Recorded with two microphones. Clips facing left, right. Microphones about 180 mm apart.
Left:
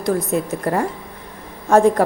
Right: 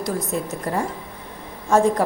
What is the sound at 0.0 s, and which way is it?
A woman's voice, 60° left (ahead or behind).